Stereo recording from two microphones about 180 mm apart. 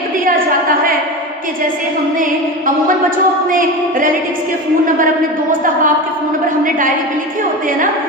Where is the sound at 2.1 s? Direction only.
50° right (ahead or behind).